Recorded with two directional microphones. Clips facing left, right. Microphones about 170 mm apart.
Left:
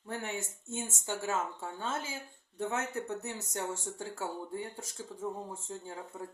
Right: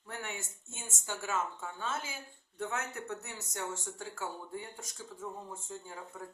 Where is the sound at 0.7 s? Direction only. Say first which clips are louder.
Left 6 dB; 25° left (ahead or behind).